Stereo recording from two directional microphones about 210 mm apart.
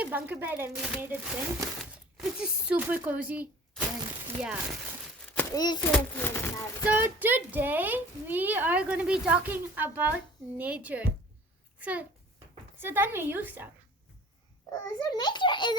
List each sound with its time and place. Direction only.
0.0 s speech: 5° right (ahead or behind)
5.5 s a child's voice: 20° left (ahead or behind)
6.8 s speech: 10° right (ahead or behind)
14.7 s a child's voice: 20° left (ahead or behind)